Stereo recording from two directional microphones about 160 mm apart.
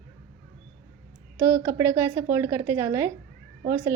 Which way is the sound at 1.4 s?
15° right (ahead or behind).